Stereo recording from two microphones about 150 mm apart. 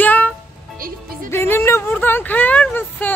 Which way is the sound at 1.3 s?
15° left (ahead or behind).